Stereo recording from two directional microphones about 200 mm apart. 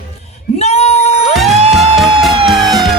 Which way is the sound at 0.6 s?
30° left (ahead or behind).